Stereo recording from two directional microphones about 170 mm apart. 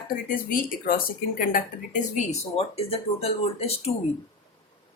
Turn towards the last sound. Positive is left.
turn(degrees=35)  # may be behind; listen again after turning